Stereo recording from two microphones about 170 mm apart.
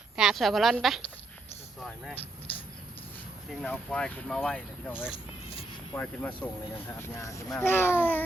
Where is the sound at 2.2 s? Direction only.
30° left (ahead or behind).